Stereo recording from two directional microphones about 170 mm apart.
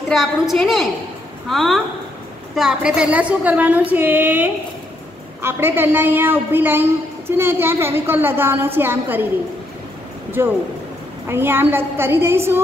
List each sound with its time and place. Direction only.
0.1 s a woman's voice: centre (ahead or behind)
10.4 s a woman's voice: 15° right (ahead or behind)